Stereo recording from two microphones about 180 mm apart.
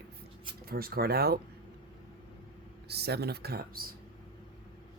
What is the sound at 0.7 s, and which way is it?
Speech, 55° right (ahead or behind).